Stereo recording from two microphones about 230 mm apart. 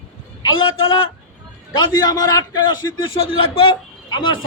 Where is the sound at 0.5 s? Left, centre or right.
Left.